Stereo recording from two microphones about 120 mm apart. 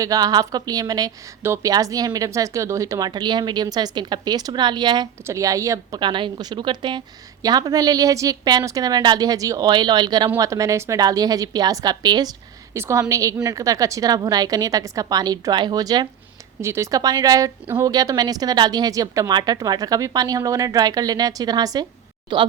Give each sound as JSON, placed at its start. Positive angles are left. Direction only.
{"t": 0.0, "sound": "a woman's voice", "side_deg": -30}
{"t": 1.4, "sound": "a woman's voice", "side_deg": -20}
{"t": 1.7, "sound": "a woman's voice", "side_deg": -30}
{"t": 5.2, "sound": "a woman's voice", "side_deg": -25}
{"t": 6.0, "sound": "a woman's voice", "side_deg": -40}
{"t": 12.7, "sound": "a woman's voice", "side_deg": -25}
{"t": 16.6, "sound": "a woman's voice", "side_deg": -20}